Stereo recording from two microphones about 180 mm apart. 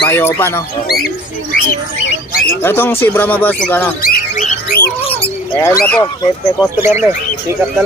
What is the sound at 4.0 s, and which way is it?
Bird, 55° left (ahead or behind).